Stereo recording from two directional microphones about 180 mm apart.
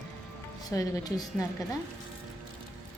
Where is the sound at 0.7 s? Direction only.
20° left (ahead or behind).